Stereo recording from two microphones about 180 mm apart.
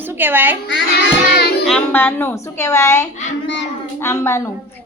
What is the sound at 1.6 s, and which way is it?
A woman's voice, 5° left (ahead or behind).